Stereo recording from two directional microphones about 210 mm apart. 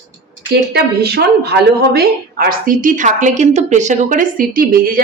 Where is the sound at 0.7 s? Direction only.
50° right (ahead or behind).